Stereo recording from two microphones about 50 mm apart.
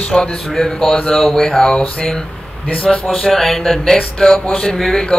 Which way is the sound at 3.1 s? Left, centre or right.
Centre.